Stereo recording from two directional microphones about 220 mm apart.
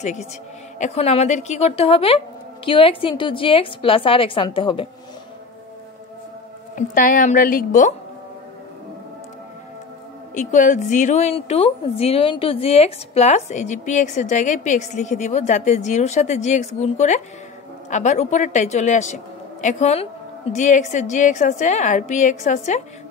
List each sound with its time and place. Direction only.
0.0 s a woman's voice: 30° left (ahead or behind)
6.7 s a woman's voice: 40° left (ahead or behind)
10.3 s a woman's voice: 35° left (ahead or behind)